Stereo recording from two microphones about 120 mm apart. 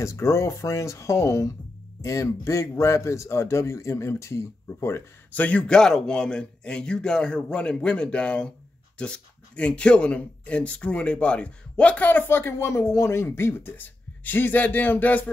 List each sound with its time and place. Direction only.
0.0 s a man's voice: 25° left (ahead or behind)